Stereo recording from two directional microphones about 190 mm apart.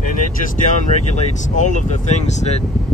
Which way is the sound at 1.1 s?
40° left (ahead or behind).